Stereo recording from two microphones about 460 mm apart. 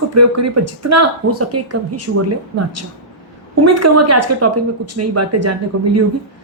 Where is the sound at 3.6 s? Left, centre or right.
Right.